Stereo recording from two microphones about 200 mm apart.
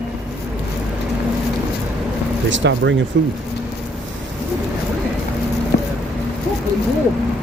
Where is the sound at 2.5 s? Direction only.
65° right (ahead or behind).